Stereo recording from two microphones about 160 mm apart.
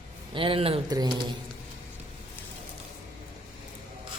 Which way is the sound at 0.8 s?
25° right (ahead or behind).